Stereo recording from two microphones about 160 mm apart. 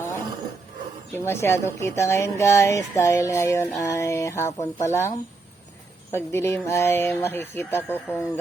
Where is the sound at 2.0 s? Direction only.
20° left (ahead or behind).